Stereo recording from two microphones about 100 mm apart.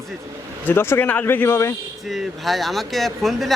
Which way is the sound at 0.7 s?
20° left (ahead or behind).